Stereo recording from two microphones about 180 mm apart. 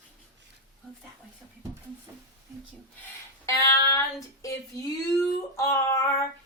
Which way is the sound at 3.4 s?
15° left (ahead or behind).